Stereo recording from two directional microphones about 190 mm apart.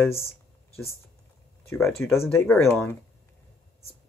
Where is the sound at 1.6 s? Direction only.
15° left (ahead or behind).